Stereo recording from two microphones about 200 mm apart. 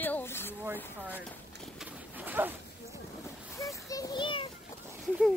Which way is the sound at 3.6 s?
15° left (ahead or behind).